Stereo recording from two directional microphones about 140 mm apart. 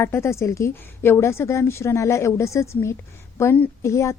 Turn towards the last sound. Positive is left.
turn(degrees=20)  # may be behind; listen again after turning